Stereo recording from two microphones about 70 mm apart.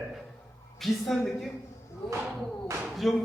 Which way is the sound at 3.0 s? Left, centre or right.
Centre.